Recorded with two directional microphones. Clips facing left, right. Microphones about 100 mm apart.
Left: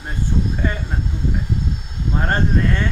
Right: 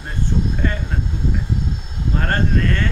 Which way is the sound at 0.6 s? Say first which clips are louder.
Even; 10° left (ahead or behind).